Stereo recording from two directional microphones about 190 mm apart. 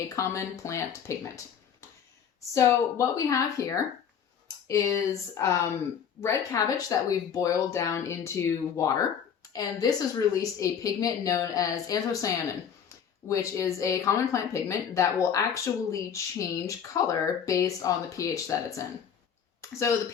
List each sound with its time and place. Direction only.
0.2 s speech: 15° left (ahead or behind)
2.6 s a woman's voice: 15° left (ahead or behind)